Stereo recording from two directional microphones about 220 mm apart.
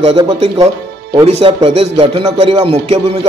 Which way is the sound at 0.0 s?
25° right (ahead or behind).